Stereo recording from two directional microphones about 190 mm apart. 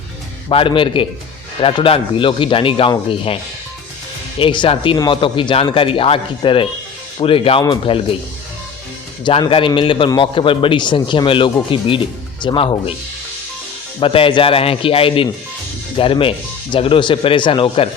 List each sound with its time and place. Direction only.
0.4 s a man's voice: 25° left (ahead or behind)
4.4 s a man's voice: 25° left (ahead or behind)
9.2 s a man's voice: 25° left (ahead or behind)
14.0 s a man's voice: 30° left (ahead or behind)